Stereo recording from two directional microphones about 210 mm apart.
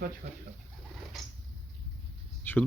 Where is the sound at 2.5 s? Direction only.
10° left (ahead or behind).